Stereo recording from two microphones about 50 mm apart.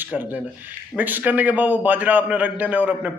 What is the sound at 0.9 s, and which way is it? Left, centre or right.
A man's voice, right.